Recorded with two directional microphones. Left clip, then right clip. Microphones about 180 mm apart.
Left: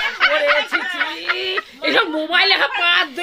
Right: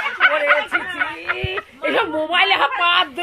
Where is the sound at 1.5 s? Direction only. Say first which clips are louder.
Left 2 dB; 35° left (ahead or behind); by 3.1 s 70° left (ahead or behind).